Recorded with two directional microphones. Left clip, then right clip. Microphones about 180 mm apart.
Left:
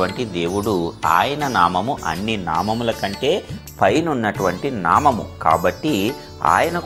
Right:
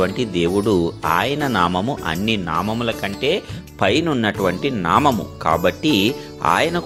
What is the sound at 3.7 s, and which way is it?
Speech, 45° right (ahead or behind).